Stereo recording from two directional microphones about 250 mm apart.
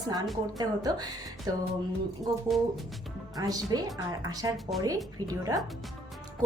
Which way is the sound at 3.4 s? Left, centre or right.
Centre.